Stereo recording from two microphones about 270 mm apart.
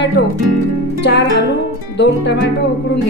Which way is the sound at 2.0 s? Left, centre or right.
Left.